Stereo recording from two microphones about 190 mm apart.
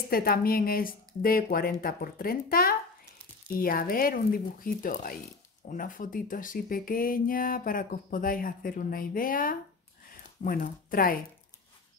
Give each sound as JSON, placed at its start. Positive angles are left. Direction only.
{"t": 0.1, "sound": "speech", "side_deg": 50}